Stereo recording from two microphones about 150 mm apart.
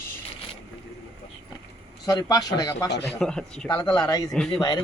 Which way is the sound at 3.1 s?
5° left (ahead or behind).